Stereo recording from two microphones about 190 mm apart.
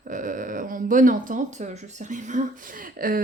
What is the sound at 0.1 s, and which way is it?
Speech, 45° right (ahead or behind).